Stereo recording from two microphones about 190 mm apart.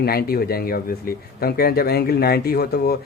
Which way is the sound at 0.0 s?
55° left (ahead or behind).